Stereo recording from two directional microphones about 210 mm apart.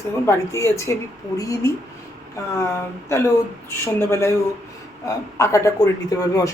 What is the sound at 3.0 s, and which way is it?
Speech, 15° left (ahead or behind).